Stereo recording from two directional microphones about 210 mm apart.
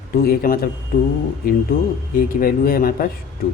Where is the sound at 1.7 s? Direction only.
40° left (ahead or behind).